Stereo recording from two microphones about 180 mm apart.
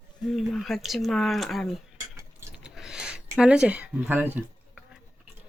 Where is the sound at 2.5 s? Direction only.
5° right (ahead or behind).